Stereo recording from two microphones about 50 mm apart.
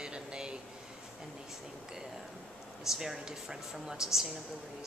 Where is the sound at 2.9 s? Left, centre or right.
Centre.